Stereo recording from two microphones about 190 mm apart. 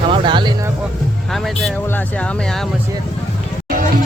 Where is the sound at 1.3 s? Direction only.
Centre (ahead or behind).